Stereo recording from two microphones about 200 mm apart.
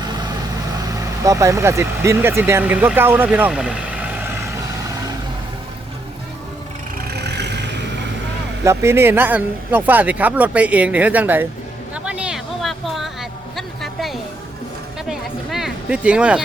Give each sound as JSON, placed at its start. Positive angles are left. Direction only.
{"t": 1.2, "sound": "speech", "side_deg": -15}
{"t": 7.2, "sound": "vehicle", "side_deg": -55}
{"t": 8.6, "sound": "speech", "side_deg": -15}
{"t": 12.0, "sound": "vehicle", "side_deg": -5}
{"t": 13.6, "sound": "a sound", "side_deg": 0}
{"t": 15.0, "sound": "music", "side_deg": 0}